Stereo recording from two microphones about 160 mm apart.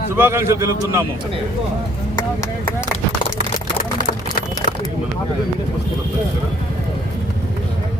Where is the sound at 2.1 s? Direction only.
20° left (ahead or behind).